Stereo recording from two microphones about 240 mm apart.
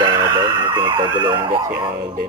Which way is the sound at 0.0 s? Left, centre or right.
Centre.